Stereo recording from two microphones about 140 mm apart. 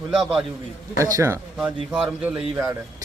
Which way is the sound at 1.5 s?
5° right (ahead or behind).